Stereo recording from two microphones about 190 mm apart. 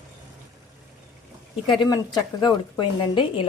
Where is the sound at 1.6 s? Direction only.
25° left (ahead or behind).